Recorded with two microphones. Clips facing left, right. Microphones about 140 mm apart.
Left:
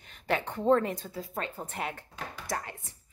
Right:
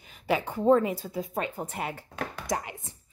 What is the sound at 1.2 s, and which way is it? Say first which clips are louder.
Speech: right 7 dB; 20° right (ahead or behind).